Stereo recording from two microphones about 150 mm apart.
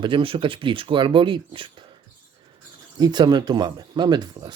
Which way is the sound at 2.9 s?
30° right (ahead or behind).